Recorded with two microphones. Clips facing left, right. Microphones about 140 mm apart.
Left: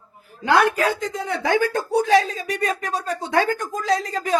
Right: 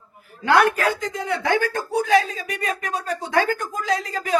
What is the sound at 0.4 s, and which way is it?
Speech, 20° left (ahead or behind).